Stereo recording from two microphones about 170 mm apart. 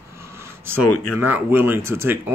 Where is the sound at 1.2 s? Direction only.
10° right (ahead or behind).